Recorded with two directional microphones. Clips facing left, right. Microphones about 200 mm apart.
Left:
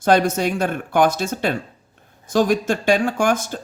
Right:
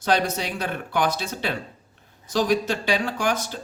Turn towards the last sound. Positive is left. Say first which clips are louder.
# left 6 dB
turn(degrees=50)  # may be behind; listen again after turning